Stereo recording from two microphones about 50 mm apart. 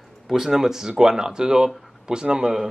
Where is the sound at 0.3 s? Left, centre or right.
Centre.